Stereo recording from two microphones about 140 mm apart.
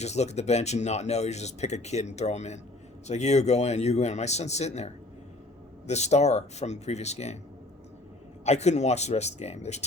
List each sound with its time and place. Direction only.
0.0 s speech: 50° left (ahead or behind)
8.4 s speech: 50° left (ahead or behind)